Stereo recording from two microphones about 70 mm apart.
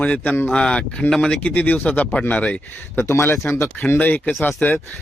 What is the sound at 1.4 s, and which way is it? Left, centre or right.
Speech, left.